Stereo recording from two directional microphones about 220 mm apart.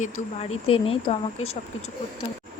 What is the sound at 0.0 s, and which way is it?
Speech, 25° left (ahead or behind).